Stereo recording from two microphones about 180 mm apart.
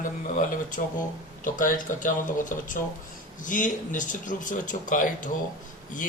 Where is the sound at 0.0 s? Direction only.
45° left (ahead or behind).